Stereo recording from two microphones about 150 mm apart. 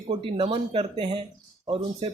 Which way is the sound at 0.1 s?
40° right (ahead or behind).